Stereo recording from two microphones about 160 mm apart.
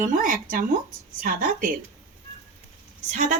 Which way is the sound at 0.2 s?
60° right (ahead or behind).